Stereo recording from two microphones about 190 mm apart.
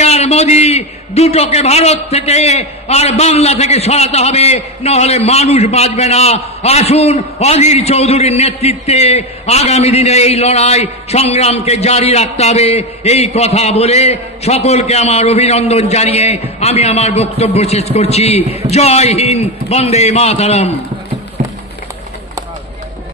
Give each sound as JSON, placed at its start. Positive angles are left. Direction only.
{"t": 0.0, "sound": "a man's voice", "side_deg": 35}